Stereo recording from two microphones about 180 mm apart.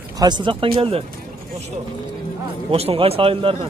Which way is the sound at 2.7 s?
30° right (ahead or behind).